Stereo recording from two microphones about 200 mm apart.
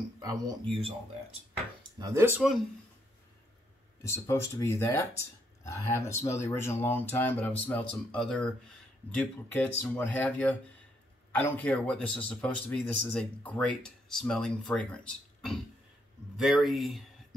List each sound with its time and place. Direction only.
0.2 s speech: 20° right (ahead or behind)
2.0 s speech: 15° right (ahead or behind)
4.1 s a man's voice: 15° left (ahead or behind)